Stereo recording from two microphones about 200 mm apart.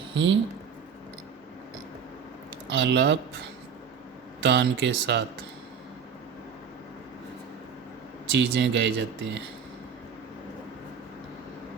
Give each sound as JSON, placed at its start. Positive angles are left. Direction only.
{"t": 0.1, "sound": "speech", "side_deg": -65}
{"t": 2.6, "sound": "speech", "side_deg": -65}
{"t": 4.4, "sound": "speech", "side_deg": -60}
{"t": 8.3, "sound": "speech", "side_deg": -60}